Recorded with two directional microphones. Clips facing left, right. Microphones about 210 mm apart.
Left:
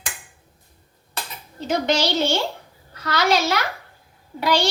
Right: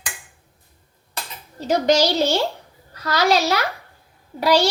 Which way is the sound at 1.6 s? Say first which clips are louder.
Right 4 dB; 40° right (ahead or behind).